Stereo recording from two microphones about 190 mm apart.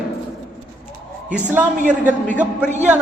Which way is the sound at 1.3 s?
10° right (ahead or behind).